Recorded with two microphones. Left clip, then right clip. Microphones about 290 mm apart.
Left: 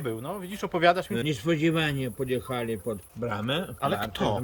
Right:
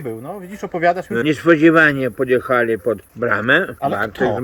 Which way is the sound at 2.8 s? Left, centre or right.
Right.